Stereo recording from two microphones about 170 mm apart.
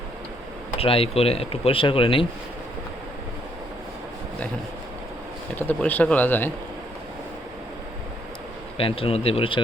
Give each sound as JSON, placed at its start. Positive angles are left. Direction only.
{"t": 0.8, "sound": "speech", "side_deg": 35}
{"t": 5.5, "sound": "speech", "side_deg": 10}
{"t": 8.8, "sound": "speech", "side_deg": 35}